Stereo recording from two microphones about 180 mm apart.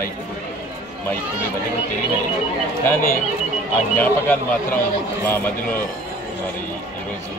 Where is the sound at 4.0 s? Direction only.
10° left (ahead or behind).